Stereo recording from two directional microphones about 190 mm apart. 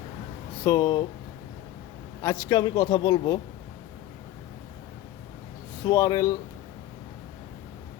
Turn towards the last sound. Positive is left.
turn(degrees=20)  # may be behind; listen again after turning